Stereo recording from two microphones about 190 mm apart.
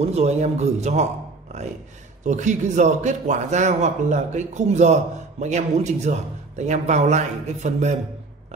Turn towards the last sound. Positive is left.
turn(degrees=-40)  # may be behind; listen again after turning